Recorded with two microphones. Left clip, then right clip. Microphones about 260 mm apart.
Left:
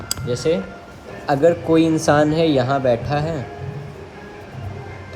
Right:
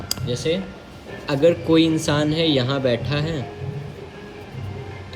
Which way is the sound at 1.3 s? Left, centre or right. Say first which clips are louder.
Left 2 dB; centre.